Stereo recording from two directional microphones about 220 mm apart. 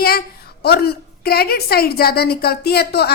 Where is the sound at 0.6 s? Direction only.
45° left (ahead or behind).